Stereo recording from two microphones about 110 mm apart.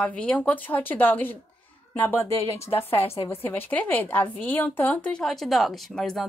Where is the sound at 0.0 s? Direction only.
10° left (ahead or behind).